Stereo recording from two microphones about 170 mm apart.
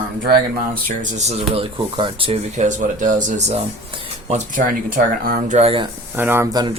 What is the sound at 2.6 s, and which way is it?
Speech, 45° right (ahead or behind).